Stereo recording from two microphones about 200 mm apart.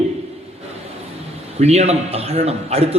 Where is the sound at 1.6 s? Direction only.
30° right (ahead or behind).